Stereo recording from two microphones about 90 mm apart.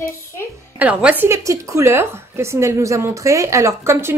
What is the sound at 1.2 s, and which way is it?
A woman's voice, 35° right (ahead or behind).